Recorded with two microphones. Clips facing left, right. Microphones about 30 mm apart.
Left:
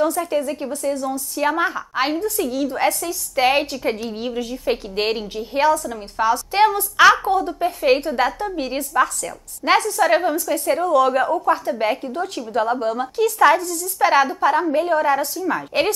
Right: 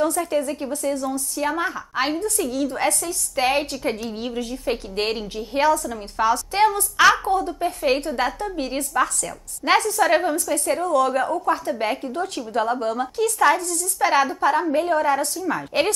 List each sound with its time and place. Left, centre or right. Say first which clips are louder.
0.0 s a woman's voice: left 2 dB; centre
6.5 s a woman's voice: left 4 dB; centre
6.8 s a woman's voice: left 3 dB; centre